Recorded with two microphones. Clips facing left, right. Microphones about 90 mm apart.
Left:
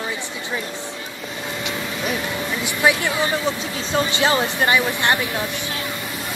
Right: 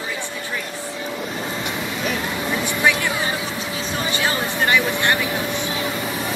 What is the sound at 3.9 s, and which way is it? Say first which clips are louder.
Speech: left 5 dB; 25° left (ahead or behind).